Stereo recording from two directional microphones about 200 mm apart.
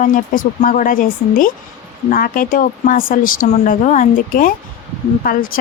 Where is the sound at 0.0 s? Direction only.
40° left (ahead or behind).